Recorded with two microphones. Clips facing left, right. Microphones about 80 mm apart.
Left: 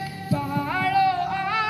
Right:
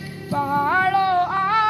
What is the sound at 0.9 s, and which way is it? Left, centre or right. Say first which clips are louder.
Music: right 3 dB; right.